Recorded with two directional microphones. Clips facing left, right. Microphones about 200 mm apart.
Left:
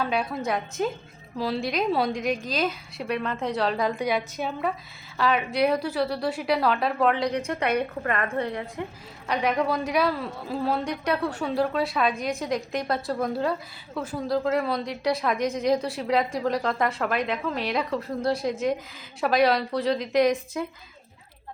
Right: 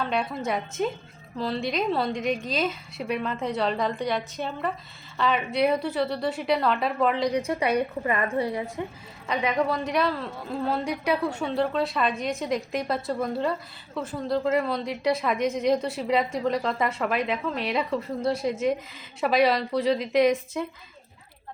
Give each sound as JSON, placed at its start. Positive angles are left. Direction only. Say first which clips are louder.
{"t": 0.0, "sound": "a woman's voice", "louder": "left 1 dB", "side_deg": 5}